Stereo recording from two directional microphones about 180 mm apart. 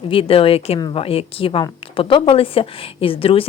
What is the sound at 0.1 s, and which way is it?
A woman's voice, 30° left (ahead or behind).